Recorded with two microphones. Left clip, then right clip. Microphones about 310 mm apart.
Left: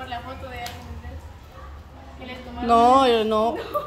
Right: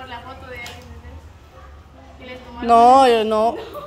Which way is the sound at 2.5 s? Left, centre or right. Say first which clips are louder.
Right 5 dB; centre.